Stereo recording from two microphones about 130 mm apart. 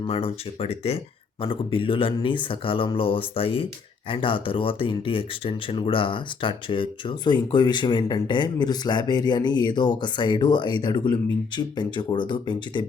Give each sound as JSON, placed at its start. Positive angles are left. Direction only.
{"t": 0.0, "sound": "speech", "side_deg": 45}